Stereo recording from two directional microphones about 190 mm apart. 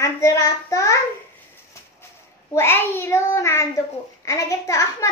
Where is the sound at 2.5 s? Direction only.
10° left (ahead or behind).